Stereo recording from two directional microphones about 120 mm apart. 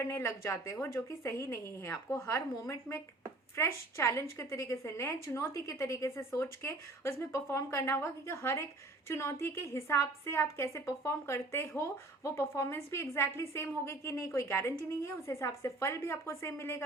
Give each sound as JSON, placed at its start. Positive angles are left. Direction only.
{"t": 0.0, "sound": "a woman's voice", "side_deg": 20}